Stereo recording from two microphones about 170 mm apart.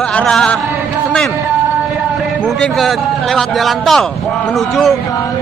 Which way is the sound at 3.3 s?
Centre (ahead or behind).